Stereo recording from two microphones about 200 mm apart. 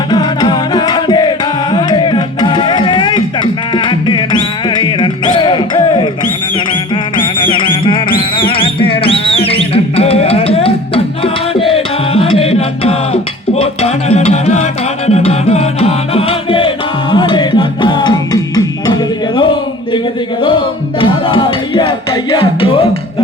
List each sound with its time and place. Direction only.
0.1 s music: 20° left (ahead or behind)
21.0 s music: 25° left (ahead or behind)